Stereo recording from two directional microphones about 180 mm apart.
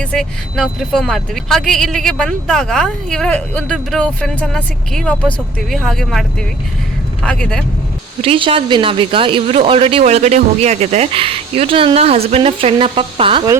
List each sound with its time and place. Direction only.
0.0 s speech: 5° left (ahead or behind)
8.2 s speech: 30° right (ahead or behind)